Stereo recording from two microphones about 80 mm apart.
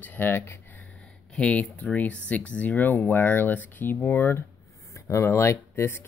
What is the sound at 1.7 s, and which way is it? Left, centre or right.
Speech, centre.